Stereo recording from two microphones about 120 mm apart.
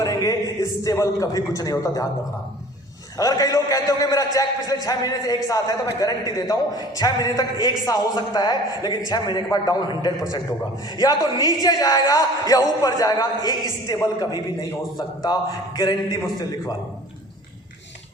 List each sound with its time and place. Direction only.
0.0 s a man's voice: 30° left (ahead or behind)
3.2 s a man's voice: 30° left (ahead or behind)